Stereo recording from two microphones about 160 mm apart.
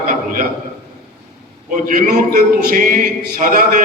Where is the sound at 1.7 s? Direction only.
55° right (ahead or behind).